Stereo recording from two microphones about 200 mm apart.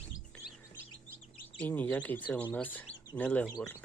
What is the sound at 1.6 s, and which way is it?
Speech, 10° left (ahead or behind).